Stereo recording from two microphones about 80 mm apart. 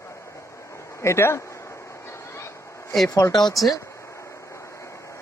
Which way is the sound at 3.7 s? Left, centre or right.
Left.